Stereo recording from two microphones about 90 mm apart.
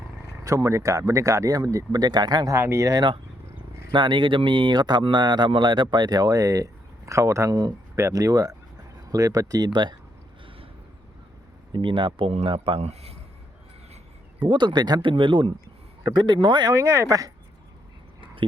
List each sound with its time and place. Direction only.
0.4 s speech: 35° right (ahead or behind)
2.6 s speech: 30° right (ahead or behind)
3.9 s speech: 60° right (ahead or behind); by 9.6 s 40° right (ahead or behind)
9.6 s speech: 60° right (ahead or behind)
11.7 s speech: 65° right (ahead or behind); by 13.1 s 90° right
14.4 s speech: 60° right (ahead or behind)
15.1 s speech: 65° right (ahead or behind)
16.0 s speech: 55° right (ahead or behind)
16.7 s speech: 35° right (ahead or behind)